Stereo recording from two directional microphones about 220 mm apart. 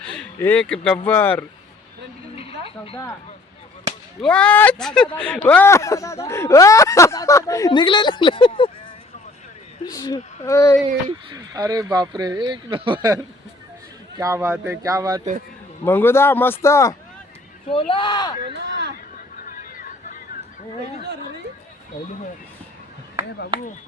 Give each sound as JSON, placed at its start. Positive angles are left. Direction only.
{"t": 0.1, "sound": "speech", "side_deg": 5}
{"t": 2.3, "sound": "a sound", "side_deg": 25}
{"t": 4.2, "sound": "speech", "side_deg": 5}
{"t": 9.8, "sound": "speech", "side_deg": 15}
{"t": 11.3, "sound": "speech", "side_deg": -20}
{"t": 15.8, "sound": "speech", "side_deg": 10}
{"t": 17.7, "sound": "speech", "side_deg": 25}
{"t": 18.6, "sound": "a sound", "side_deg": -50}
{"t": 19.5, "sound": "a sound", "side_deg": 40}
{"t": 21.0, "sound": "speech", "side_deg": -50}